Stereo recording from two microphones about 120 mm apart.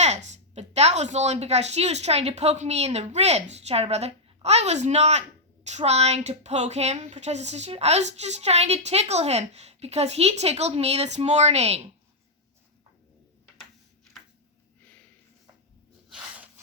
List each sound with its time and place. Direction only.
0.0 s a woman's voice: 70° right (ahead or behind)